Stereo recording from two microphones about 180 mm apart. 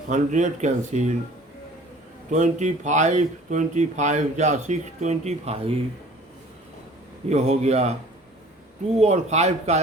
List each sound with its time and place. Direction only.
0.1 s speech: 40° right (ahead or behind)
2.3 s speech: 40° right (ahead or behind)
7.3 s speech: 40° right (ahead or behind)
9.0 s speech: 40° right (ahead or behind)